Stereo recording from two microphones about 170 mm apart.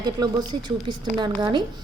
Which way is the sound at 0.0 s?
25° right (ahead or behind).